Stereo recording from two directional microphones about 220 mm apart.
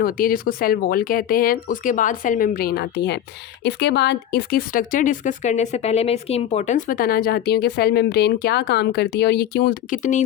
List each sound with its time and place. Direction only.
0.0 s speech: 40° left (ahead or behind)